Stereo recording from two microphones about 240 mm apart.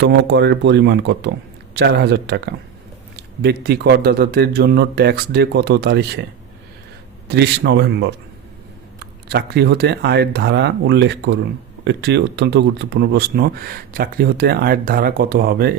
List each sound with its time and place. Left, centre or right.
0.0 s speech: right
7.3 s speech: right
9.3 s speech: right